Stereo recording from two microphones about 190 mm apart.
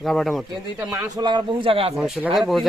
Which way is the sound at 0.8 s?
10° right (ahead or behind).